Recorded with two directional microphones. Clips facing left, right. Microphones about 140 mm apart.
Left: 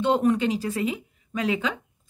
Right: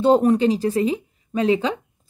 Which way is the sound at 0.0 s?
35° right (ahead or behind).